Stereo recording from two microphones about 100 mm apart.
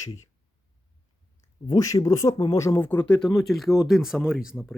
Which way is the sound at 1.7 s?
35° left (ahead or behind).